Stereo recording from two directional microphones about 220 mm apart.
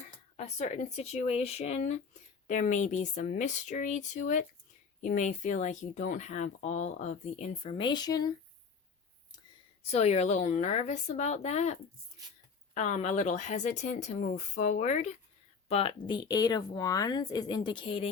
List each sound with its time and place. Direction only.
0.3 s speech: 30° left (ahead or behind)
9.9 s a woman's voice: 30° left (ahead or behind)